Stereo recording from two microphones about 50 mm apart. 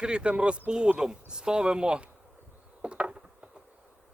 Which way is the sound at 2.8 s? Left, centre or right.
Right.